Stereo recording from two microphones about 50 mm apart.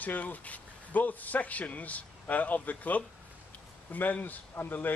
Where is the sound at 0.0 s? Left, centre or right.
Left.